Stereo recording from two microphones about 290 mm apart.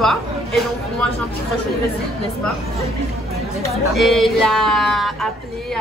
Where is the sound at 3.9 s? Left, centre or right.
Centre.